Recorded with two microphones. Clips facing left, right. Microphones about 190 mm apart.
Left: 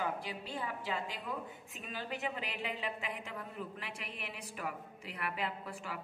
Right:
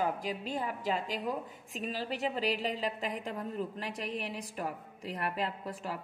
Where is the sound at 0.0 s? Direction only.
40° right (ahead or behind).